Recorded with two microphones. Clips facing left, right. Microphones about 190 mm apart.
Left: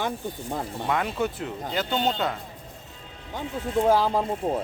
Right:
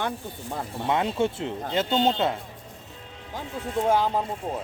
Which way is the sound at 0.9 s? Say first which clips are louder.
Right 3 dB; 25° right (ahead or behind).